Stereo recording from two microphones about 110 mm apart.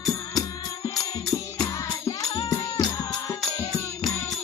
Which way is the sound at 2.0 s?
30° left (ahead or behind).